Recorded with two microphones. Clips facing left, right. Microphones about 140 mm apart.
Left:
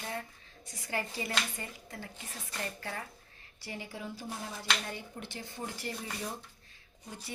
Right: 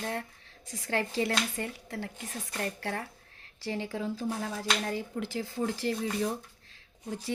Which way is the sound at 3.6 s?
90° right.